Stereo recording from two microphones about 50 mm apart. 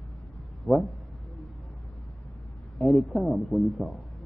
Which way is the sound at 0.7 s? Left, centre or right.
Centre.